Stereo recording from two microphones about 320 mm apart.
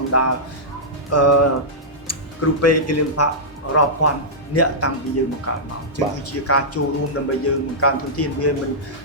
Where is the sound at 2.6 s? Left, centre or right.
Left.